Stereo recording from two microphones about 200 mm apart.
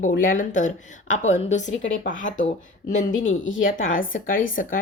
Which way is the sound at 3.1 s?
75° left (ahead or behind).